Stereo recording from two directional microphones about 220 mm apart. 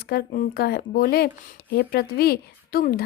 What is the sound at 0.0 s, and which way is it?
Speech, 45° left (ahead or behind).